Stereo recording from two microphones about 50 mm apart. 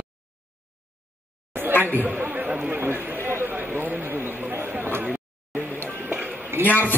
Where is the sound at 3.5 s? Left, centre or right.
Right.